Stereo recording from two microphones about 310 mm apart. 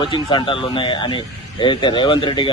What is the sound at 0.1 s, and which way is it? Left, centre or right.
A man's voice, centre.